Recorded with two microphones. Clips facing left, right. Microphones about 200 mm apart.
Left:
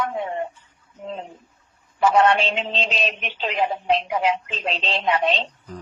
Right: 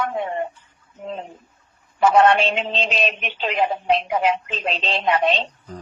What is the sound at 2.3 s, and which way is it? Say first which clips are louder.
A man's voice: right 2 dB; 55° right (ahead or behind).